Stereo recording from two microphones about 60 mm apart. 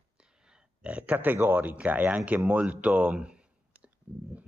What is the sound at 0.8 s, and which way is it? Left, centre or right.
Speech, right.